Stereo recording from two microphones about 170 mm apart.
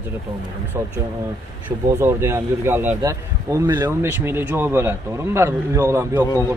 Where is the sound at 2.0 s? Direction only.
15° right (ahead or behind).